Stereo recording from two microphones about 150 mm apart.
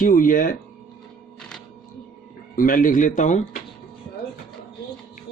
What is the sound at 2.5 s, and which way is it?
Speech, 65° left (ahead or behind).